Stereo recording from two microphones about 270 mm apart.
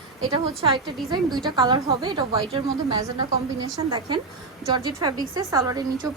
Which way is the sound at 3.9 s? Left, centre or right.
Centre.